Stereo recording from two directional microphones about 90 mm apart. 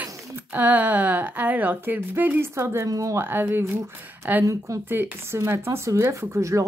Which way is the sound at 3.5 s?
25° right (ahead or behind).